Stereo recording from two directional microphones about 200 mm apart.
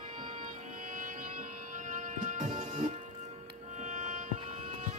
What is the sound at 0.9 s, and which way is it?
Music, 40° right (ahead or behind).